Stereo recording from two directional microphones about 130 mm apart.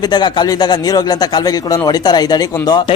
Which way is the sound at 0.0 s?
35° left (ahead or behind).